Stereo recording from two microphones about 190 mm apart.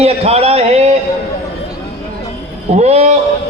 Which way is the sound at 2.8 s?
35° right (ahead or behind).